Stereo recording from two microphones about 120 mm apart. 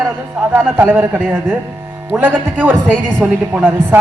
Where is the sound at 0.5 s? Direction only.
20° right (ahead or behind).